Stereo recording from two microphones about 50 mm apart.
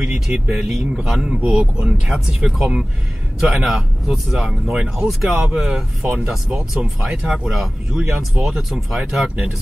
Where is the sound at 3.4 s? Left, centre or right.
Centre.